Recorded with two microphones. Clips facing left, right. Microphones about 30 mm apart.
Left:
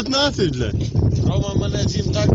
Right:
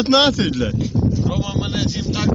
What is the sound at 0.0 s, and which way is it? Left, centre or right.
Speech, right.